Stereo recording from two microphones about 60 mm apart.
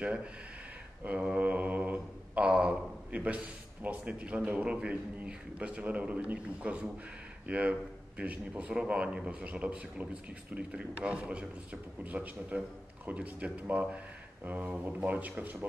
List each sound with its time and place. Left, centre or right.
0.0 s a man's voice: centre